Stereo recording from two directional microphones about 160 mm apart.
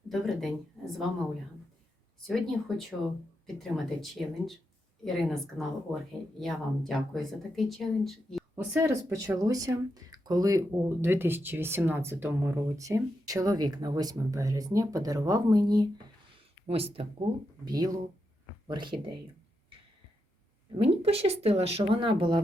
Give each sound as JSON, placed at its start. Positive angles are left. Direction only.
{"t": 0.1, "sound": "speech", "side_deg": 0}
{"t": 2.2, "sound": "speech", "side_deg": 0}
{"t": 8.5, "sound": "speech", "side_deg": -15}
{"t": 16.6, "sound": "speech", "side_deg": -40}
{"t": 17.7, "sound": "speech", "side_deg": -25}
{"t": 20.7, "sound": "speech", "side_deg": -40}